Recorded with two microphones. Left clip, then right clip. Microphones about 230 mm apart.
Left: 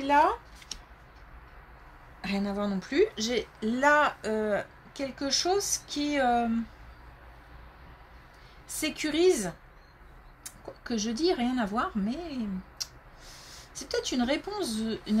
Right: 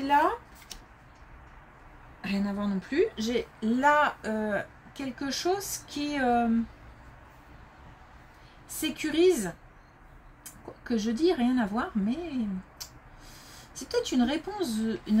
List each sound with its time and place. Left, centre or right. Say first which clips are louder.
0.0 s speech: left 1 dB; left
2.2 s a woman's voice: left 1 dB; left
8.7 s a woman's voice: right 1 dB; left
10.6 s a woman's voice: right 2 dB; left